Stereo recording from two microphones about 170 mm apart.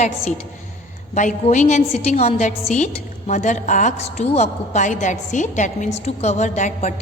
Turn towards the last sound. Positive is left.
turn(degrees=40)  # may be behind; listen again after turning